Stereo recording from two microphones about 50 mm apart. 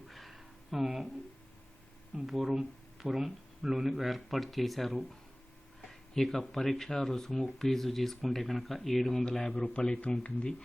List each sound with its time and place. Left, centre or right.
0.1 s a sound: centre
2.2 s a man's voice: centre
9.6 s speech: left